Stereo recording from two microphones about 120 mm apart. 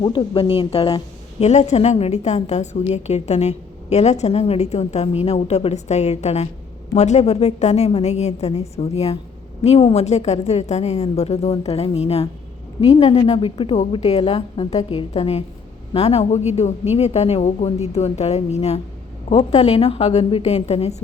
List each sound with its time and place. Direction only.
0.0 s a woman's voice: 40° left (ahead or behind)
14.0 s a woman's voice: 60° left (ahead or behind)